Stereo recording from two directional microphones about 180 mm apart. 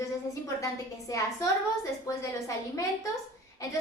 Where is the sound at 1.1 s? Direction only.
15° left (ahead or behind).